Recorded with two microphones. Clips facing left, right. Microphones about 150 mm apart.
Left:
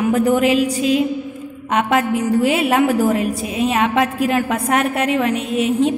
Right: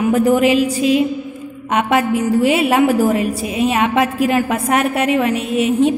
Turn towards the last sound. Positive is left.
turn(degrees=-5)  # may be behind; listen again after turning